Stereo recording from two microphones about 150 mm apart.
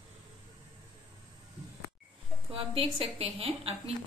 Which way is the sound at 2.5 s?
35° right (ahead or behind).